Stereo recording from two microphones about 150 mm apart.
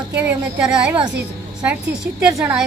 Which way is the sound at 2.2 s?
Centre (ahead or behind).